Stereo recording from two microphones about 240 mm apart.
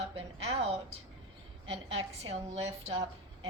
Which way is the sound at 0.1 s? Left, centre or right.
Right.